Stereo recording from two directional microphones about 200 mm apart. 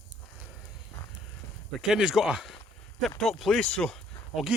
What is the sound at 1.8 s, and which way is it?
Speech, 5° right (ahead or behind).